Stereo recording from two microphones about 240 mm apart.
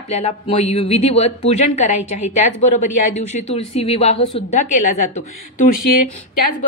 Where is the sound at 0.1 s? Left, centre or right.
Left.